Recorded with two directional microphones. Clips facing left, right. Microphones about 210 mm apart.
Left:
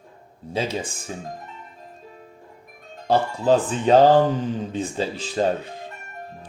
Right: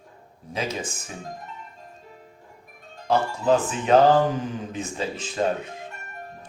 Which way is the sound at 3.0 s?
30° left (ahead or behind).